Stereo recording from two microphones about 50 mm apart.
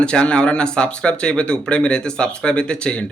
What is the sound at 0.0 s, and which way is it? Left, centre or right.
A man's voice, centre.